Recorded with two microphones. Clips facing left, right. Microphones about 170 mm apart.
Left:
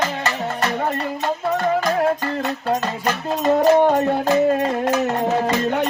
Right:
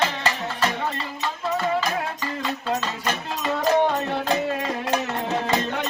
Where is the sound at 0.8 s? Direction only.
50° left (ahead or behind).